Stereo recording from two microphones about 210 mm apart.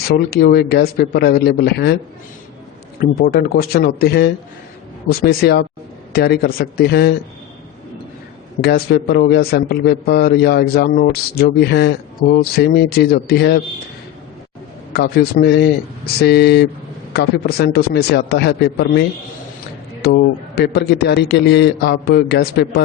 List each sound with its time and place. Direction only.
0.3 s a man's voice: 50° left (ahead or behind)
3.0 s a man's voice: 45° left (ahead or behind)
8.6 s a man's voice: 50° left (ahead or behind)
14.9 s a man's voice: 50° left (ahead or behind)